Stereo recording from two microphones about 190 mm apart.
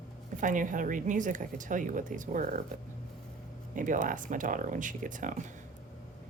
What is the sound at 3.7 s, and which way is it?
Speech, 45° right (ahead or behind).